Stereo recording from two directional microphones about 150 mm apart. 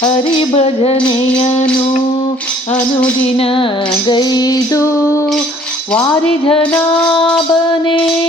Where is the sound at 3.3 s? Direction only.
35° left (ahead or behind); by 5.0 s 20° left (ahead or behind).